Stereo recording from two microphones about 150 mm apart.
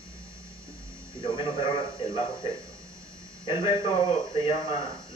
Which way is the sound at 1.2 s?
35° left (ahead or behind).